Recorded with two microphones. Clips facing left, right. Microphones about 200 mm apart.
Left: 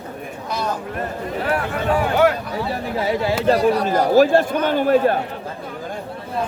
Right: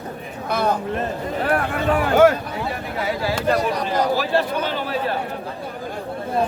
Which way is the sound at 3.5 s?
45° left (ahead or behind).